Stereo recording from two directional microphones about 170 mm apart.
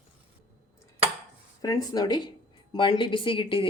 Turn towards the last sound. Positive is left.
turn(degrees=30)  # may be behind; listen again after turning